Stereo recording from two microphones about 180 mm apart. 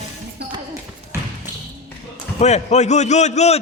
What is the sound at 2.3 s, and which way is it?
A man's voice, 40° left (ahead or behind).